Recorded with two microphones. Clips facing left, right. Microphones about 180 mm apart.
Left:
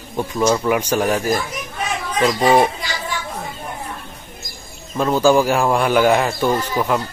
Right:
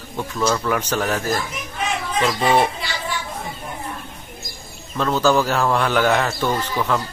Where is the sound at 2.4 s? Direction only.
40° left (ahead or behind).